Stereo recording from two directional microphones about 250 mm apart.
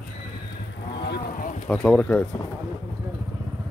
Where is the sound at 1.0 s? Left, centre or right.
Left.